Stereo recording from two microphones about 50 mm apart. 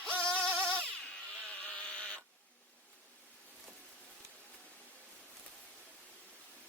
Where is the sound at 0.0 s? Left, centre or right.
Centre.